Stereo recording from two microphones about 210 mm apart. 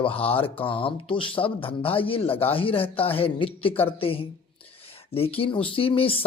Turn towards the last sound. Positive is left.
turn(degrees=25)  # may be behind; listen again after turning